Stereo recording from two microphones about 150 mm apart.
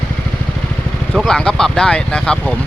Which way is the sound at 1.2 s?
5° left (ahead or behind).